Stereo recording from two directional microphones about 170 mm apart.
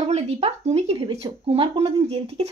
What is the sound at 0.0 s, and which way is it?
Speech, 40° right (ahead or behind).